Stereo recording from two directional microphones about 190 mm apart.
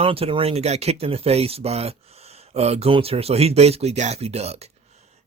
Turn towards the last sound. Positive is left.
turn(degrees=-35)  # may be behind; listen again after turning